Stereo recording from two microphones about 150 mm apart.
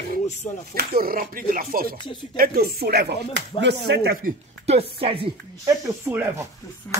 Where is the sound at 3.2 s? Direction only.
30° left (ahead or behind).